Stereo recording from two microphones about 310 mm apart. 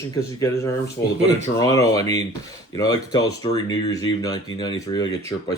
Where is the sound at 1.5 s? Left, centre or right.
Centre.